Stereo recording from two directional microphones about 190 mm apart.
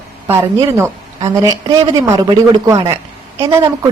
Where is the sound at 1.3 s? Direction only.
20° right (ahead or behind).